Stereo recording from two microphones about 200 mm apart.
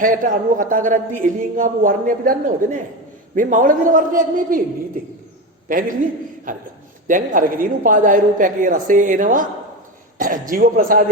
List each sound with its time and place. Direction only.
0.0 s a man's voice: 40° right (ahead or behind)
6.5 s a man's voice: 40° right (ahead or behind)